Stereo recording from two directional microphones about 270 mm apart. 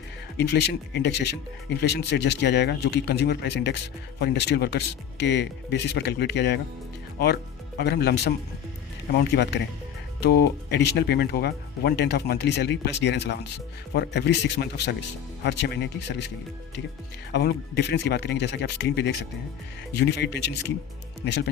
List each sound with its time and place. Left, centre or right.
0.3 s speech: left
7.8 s speech: left
9.3 s speech: left
17.3 s speech: left